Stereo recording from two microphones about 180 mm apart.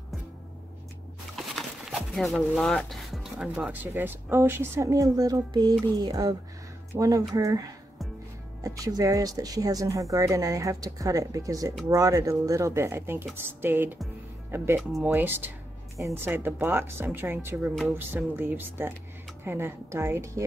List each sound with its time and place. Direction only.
1.3 s a woman's voice: centre (ahead or behind)
14.8 s speech: centre (ahead or behind)
15.0 s a woman's voice: 10° right (ahead or behind)